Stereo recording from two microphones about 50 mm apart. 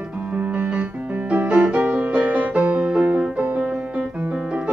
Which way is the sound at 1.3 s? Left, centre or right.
Right.